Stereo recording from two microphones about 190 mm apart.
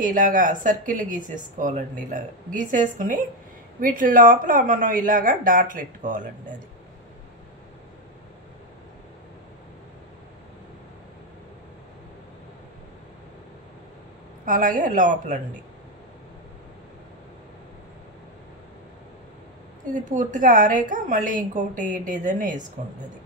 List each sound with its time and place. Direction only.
0.0 s speech: 45° right (ahead or behind)
14.4 s speech: 45° right (ahead or behind)
19.9 s speech: 40° right (ahead or behind)